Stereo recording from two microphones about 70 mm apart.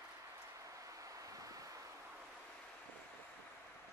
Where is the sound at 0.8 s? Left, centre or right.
Right.